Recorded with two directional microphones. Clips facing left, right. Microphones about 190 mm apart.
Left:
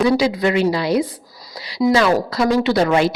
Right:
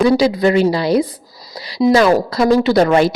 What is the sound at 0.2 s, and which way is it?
Speech, 35° right (ahead or behind).